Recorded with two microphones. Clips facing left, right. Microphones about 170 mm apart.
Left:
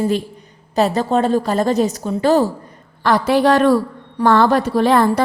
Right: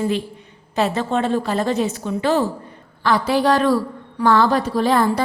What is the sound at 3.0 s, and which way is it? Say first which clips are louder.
A woman's voice: left 3 dB; 55° left (ahead or behind).